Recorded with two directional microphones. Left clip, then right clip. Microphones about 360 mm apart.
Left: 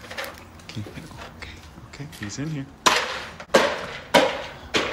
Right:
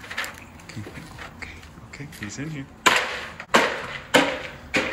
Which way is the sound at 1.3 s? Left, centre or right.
Centre.